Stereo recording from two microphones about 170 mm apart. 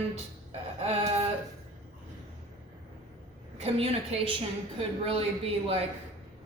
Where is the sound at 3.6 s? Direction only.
35° right (ahead or behind).